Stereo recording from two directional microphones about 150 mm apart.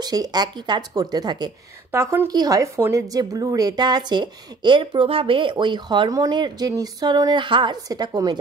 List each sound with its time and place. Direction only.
0.0 s a woman's voice: 25° right (ahead or behind)
1.9 s a woman's voice: 15° right (ahead or behind)